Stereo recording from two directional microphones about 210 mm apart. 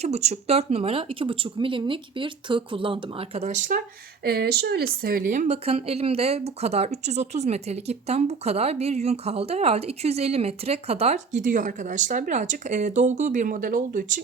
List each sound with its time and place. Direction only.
0.0 s speech: 30° right (ahead or behind)
4.2 s a woman's voice: 50° right (ahead or behind)